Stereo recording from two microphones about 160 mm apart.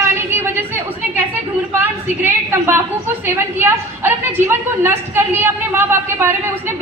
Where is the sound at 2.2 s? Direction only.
15° right (ahead or behind).